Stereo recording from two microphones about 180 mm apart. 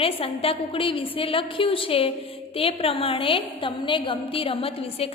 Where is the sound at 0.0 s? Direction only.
30° left (ahead or behind).